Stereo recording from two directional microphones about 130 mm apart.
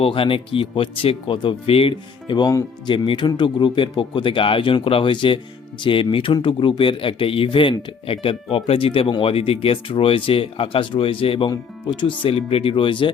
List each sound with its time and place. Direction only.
0.0 s speech: 45° left (ahead or behind)
12.2 s speech: 50° left (ahead or behind)